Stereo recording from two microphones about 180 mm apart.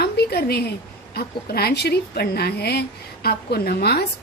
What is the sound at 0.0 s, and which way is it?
A woman's voice, 60° left (ahead or behind).